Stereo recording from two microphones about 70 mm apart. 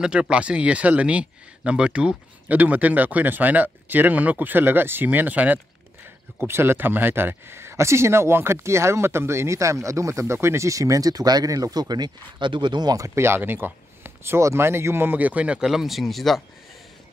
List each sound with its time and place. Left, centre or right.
0.0 s speech: centre
6.4 s speech: right
12.6 s speech: right
12.9 s speech: right; by 15.7 s centre
15.7 s speech: centre